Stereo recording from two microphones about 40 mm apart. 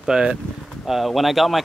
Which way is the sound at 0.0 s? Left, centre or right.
Centre.